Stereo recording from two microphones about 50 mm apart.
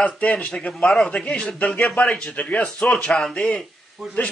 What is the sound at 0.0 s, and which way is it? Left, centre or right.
Speech, left.